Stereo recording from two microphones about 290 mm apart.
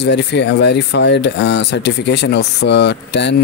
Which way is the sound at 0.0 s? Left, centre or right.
Left.